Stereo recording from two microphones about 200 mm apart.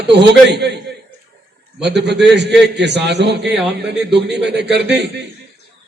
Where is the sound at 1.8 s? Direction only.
60° right (ahead or behind).